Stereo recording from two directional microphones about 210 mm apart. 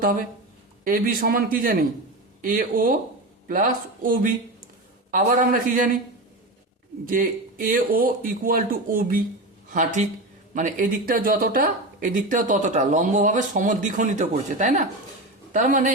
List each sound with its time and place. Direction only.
0.0 s a man's voice: 40° right (ahead or behind)
7.1 s speech: 40° right (ahead or behind)